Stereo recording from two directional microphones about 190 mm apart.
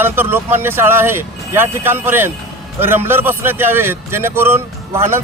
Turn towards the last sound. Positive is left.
turn(degrees=-15)  # may be behind; listen again after turning